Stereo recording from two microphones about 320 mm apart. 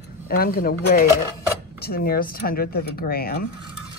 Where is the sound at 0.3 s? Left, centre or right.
Left.